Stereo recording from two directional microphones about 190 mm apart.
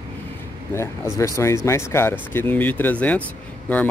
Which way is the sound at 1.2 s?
15° left (ahead or behind).